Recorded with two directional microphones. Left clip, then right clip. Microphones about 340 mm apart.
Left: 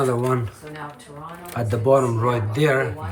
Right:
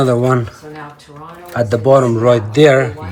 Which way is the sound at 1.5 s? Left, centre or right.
Right.